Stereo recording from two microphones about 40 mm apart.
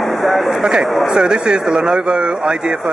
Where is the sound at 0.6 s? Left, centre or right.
Right.